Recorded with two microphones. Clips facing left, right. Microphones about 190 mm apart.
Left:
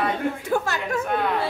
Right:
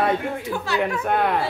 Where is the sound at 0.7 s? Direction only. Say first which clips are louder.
Right 4 dB; 45° left (ahead or behind).